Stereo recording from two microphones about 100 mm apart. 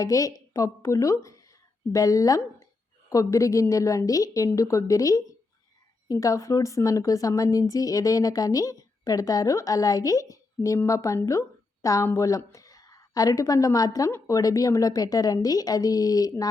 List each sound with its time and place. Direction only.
0.0 s a woman's voice: 35° left (ahead or behind)